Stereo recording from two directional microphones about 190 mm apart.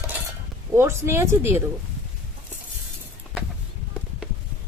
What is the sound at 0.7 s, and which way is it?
Speech, 15° right (ahead or behind).